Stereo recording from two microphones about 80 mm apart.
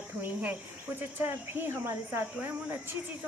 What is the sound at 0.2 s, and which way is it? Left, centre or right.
Speech, right.